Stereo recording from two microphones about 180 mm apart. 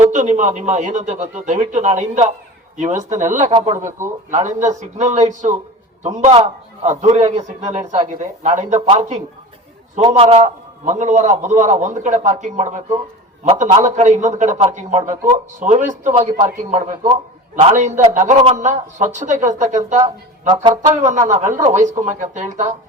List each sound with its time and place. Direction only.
0.0 s a man's voice: 40° right (ahead or behind)
13.8 s a man's voice: 40° right (ahead or behind)